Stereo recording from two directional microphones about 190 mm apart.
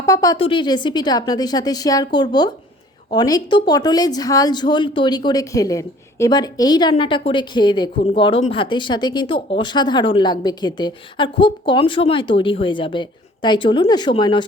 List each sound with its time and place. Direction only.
0.0 s speech: 15° left (ahead or behind)
0.3 s a woman's voice: 25° left (ahead or behind)